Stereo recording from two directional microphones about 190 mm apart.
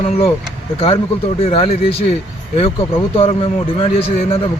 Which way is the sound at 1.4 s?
30° left (ahead or behind).